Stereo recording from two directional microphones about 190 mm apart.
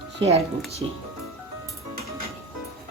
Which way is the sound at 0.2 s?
35° right (ahead or behind).